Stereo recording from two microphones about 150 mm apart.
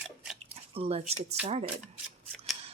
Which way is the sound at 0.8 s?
40° right (ahead or behind).